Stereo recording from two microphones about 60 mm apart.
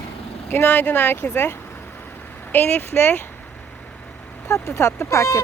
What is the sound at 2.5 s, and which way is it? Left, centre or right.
Speech, left.